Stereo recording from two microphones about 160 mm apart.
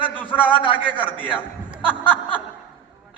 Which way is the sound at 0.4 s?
30° left (ahead or behind).